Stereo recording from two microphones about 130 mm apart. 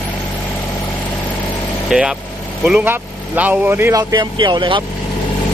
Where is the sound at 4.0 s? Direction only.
35° right (ahead or behind).